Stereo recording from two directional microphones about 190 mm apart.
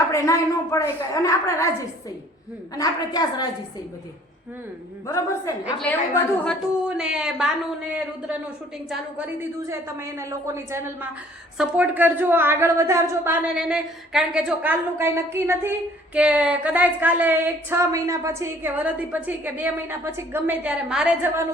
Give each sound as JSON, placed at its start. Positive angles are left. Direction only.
{"t": 0.0, "sound": "a woman's voice", "side_deg": 15}
{"t": 5.0, "sound": "a woman's voice", "side_deg": 15}
{"t": 6.4, "sound": "a woman's voice", "side_deg": 0}
{"t": 8.9, "sound": "speech", "side_deg": -5}